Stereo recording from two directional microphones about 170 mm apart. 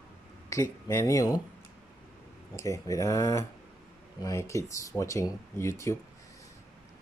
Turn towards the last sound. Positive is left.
turn(degrees=15)  # may be behind; listen again after turning